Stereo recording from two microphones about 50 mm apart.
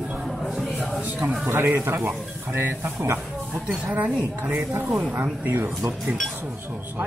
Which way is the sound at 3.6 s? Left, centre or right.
Right.